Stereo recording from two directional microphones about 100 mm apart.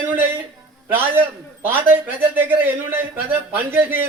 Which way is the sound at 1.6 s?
20° right (ahead or behind).